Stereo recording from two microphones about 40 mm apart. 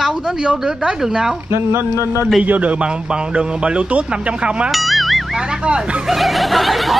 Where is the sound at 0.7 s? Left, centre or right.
Centre.